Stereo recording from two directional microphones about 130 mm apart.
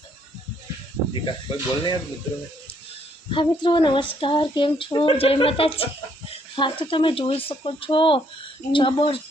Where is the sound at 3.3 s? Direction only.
40° left (ahead or behind).